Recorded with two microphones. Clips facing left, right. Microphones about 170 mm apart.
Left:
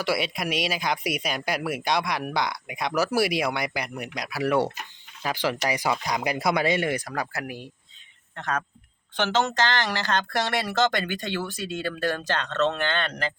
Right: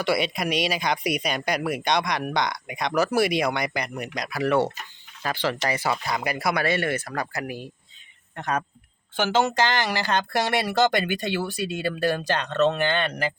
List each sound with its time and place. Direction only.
0.0 s speech: centre (ahead or behind)
7.1 s speech: centre (ahead or behind)
8.4 s speech: 15° right (ahead or behind)
9.5 s speech: 15° right (ahead or behind)